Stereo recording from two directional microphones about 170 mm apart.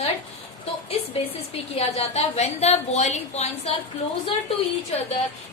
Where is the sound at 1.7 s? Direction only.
40° left (ahead or behind).